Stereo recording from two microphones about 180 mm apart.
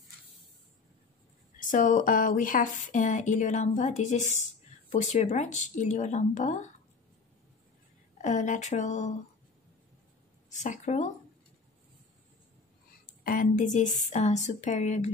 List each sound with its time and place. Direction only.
1.6 s a woman's voice: 45° left (ahead or behind)
8.2 s a woman's voice: 45° left (ahead or behind)
10.5 s speech: 40° left (ahead or behind)
13.2 s a woman's voice: 50° left (ahead or behind)